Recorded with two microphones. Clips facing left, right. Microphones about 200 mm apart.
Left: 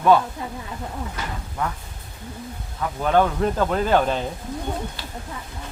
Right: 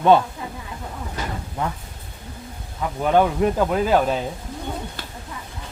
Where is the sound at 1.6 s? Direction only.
25° right (ahead or behind).